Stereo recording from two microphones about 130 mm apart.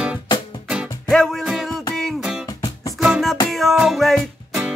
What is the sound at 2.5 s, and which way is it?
Music, 25° left (ahead or behind).